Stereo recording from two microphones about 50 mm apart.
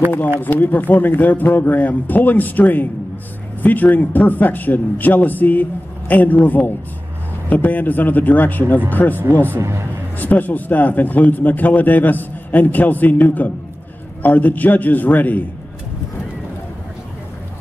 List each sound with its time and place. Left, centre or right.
0.4 s a man's voice: left
9.3 s a man's voice: right
9.6 s a man's voice: right
10.1 s a man's voice: left